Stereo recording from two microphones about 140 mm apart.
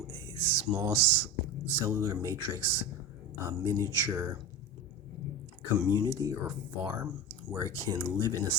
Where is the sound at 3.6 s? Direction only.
20° right (ahead or behind).